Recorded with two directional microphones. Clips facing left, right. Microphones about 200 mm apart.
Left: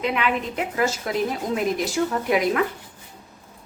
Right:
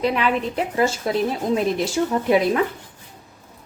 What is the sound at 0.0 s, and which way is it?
A woman's voice, 35° right (ahead or behind).